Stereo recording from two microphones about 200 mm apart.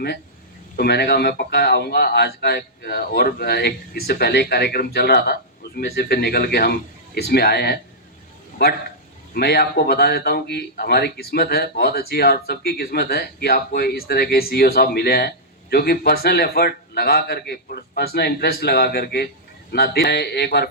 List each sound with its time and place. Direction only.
0.8 s a man's voice: 55° left (ahead or behind)